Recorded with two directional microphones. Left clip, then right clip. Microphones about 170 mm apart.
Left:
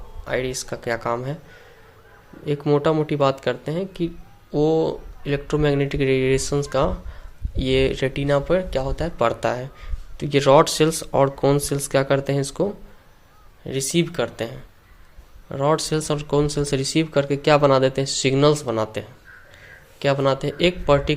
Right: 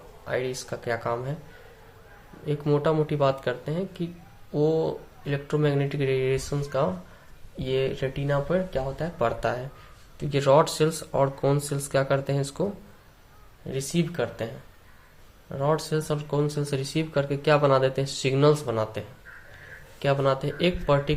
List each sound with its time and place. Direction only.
0.3 s speech: 45° left (ahead or behind)
2.4 s speech: 35° left (ahead or behind)
13.7 s speech: 50° left (ahead or behind)
15.5 s speech: 50° left (ahead or behind)